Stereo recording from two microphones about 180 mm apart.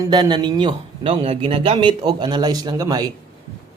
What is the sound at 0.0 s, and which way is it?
Speech, 25° right (ahead or behind).